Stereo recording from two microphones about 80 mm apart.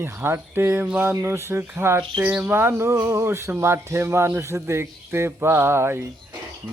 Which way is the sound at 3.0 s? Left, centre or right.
Right.